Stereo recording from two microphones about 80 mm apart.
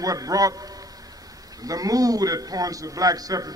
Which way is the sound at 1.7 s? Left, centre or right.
Right.